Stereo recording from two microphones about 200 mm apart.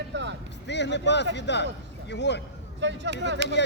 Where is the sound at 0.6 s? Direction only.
60° left (ahead or behind).